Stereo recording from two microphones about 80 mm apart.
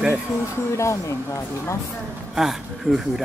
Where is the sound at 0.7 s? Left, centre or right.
Left.